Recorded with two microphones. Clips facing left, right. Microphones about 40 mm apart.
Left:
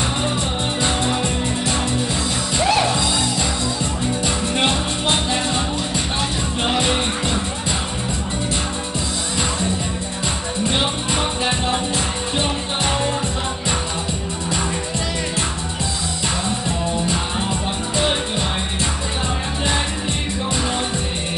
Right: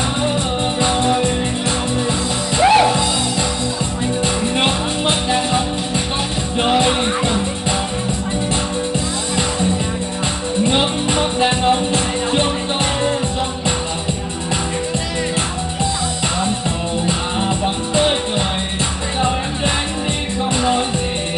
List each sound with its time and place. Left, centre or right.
2.5 s music: right
6.7 s music: centre